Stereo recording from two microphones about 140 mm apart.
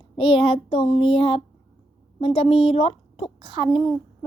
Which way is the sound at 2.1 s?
40° left (ahead or behind).